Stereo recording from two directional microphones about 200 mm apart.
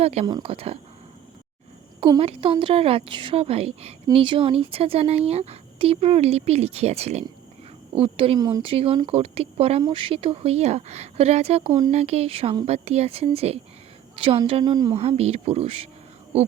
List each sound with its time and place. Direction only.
0.0 s speech: 30° right (ahead or behind)
2.0 s speech: 25° right (ahead or behind)